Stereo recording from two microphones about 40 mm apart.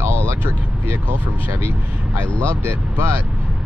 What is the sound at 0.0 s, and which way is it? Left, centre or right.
Vehicle, right.